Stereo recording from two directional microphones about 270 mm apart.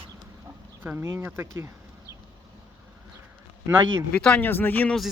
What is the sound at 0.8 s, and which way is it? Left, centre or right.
Speech, centre.